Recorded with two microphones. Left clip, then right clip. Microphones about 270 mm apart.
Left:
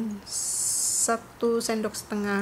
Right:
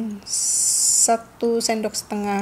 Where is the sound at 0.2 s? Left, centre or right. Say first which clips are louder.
Right 9 dB; centre.